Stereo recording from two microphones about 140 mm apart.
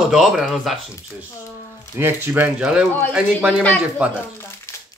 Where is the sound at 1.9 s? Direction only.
15° right (ahead or behind).